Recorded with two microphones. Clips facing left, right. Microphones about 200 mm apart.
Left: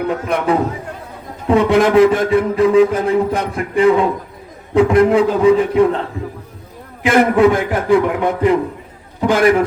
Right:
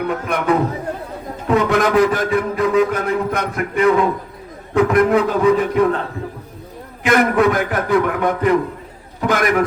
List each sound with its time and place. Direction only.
0.1 s a man's voice: 30° left (ahead or behind)
7.0 s a man's voice: 25° left (ahead or behind)